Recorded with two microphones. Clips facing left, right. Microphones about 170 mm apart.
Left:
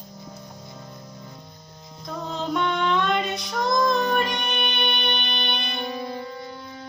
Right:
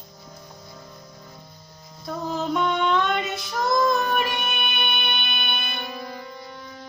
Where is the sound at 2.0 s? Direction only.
5° right (ahead or behind).